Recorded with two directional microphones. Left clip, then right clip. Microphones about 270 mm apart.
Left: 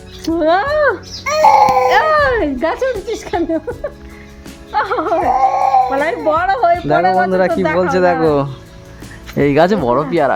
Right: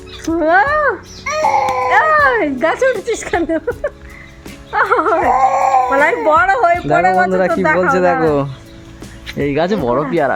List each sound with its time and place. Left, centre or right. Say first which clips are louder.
0.3 s speech: right 1 dB; centre
0.8 s speech: left 1 dB; left
2.1 s speech: right 1 dB; centre
9.4 s speech: left 4 dB; centre